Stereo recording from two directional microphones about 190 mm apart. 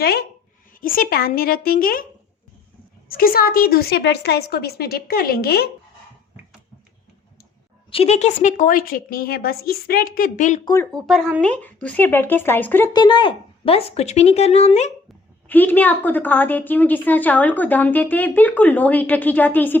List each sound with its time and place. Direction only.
0.0 s a sound: 55° left (ahead or behind)
0.8 s a woman's voice: 50° left (ahead or behind)
3.1 s a woman's voice: 50° left (ahead or behind)
7.9 s a woman's voice: 30° left (ahead or behind)
10.9 s a woman's voice: centre (ahead or behind); by 14.9 s 35° left (ahead or behind)
15.4 s a woman's voice: 10° left (ahead or behind)